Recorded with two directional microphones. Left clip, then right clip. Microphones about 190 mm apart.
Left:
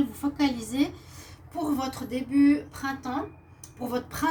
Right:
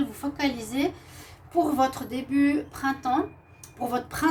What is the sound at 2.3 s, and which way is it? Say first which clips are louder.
Speech: left 2 dB; 40° right (ahead or behind).